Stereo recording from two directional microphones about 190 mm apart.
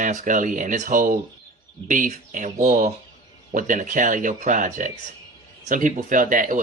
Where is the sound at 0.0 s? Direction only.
45° right (ahead or behind).